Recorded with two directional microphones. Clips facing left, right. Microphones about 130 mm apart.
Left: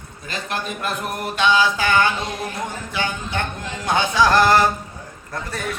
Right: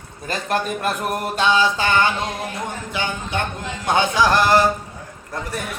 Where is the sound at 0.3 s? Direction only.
40° right (ahead or behind).